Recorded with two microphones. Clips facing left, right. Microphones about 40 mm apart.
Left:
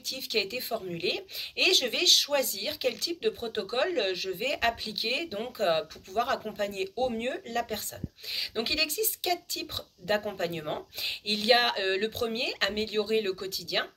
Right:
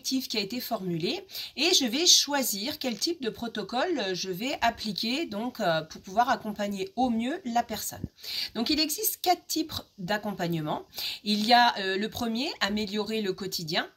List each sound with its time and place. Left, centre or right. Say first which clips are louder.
0.0 s speech: right 1 dB; centre
11.8 s speech: left 1 dB; left
12.3 s speech: right 1 dB; centre